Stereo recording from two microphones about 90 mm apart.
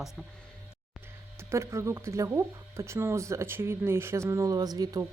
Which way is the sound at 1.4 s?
30° right (ahead or behind).